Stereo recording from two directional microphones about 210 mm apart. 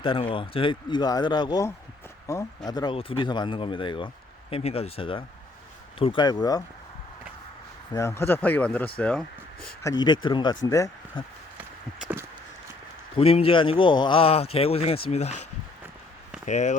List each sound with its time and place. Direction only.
0.0 s speech: 25° left (ahead or behind)
7.9 s speech: 15° left (ahead or behind)
9.8 s speech: 20° left (ahead or behind)
11.9 s a sound: 5° right (ahead or behind)
13.1 s speech: 25° left (ahead or behind)
16.5 s speech: 35° left (ahead or behind)